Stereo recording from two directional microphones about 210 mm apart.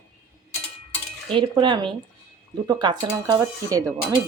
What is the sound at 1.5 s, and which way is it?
Speech, 20° right (ahead or behind).